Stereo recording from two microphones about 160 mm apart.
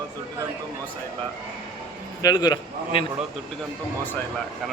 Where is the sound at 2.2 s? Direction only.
25° left (ahead or behind).